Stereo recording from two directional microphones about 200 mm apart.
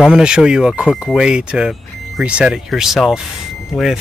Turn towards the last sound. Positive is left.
turn(degrees=0)  # may be behind; listen again after turning